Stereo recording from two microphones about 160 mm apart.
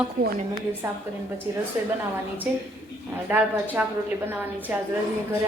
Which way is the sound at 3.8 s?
10° right (ahead or behind).